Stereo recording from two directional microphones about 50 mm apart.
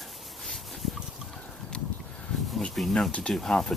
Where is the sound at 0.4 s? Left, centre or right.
Centre.